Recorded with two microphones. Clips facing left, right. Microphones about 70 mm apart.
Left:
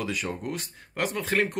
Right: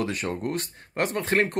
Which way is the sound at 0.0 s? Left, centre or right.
Right.